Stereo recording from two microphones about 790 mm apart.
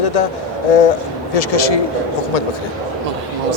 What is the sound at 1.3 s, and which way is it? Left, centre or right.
Speech, left.